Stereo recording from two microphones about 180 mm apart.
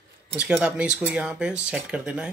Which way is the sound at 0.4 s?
5° right (ahead or behind).